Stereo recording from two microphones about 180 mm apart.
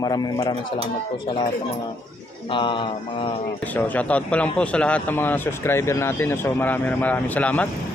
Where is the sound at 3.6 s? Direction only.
10° left (ahead or behind).